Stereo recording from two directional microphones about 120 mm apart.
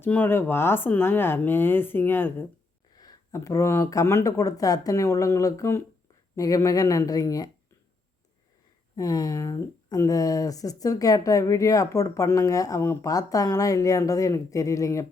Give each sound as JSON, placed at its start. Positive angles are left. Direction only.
{"t": 0.0, "sound": "speech", "side_deg": 15}
{"t": 2.9, "sound": "speech", "side_deg": 30}
{"t": 9.0, "sound": "speech", "side_deg": 30}